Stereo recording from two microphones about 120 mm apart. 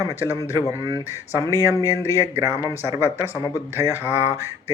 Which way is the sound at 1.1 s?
25° right (ahead or behind).